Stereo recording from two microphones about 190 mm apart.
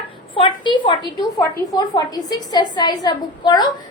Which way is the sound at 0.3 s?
25° left (ahead or behind).